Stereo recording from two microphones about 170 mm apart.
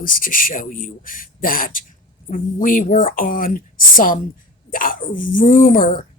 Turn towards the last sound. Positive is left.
turn(degrees=55)  # may be behind; listen again after turning